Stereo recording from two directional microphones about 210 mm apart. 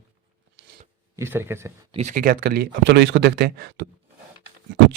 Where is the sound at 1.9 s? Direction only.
35° right (ahead or behind); by 3.8 s 50° right (ahead or behind).